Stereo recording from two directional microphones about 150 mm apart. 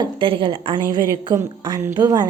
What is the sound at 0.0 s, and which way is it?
A woman's voice, 35° right (ahead or behind).